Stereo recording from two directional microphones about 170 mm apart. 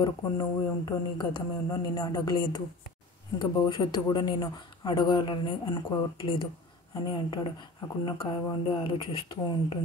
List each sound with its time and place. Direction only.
0.0 s a man's voice: 25° left (ahead or behind)